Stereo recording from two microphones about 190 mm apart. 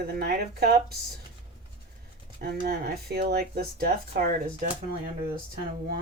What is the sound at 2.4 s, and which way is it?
Speech, 55° right (ahead or behind).